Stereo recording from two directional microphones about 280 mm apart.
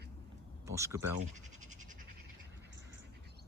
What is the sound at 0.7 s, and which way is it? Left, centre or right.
Speech, centre.